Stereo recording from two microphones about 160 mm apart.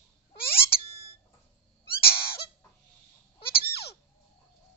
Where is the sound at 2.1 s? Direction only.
35° left (ahead or behind).